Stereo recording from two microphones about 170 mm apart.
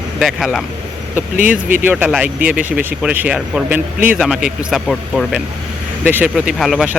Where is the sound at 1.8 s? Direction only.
10° right (ahead or behind).